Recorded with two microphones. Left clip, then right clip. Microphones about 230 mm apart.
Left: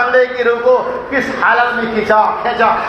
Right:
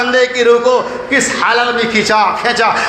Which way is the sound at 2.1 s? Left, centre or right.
Right.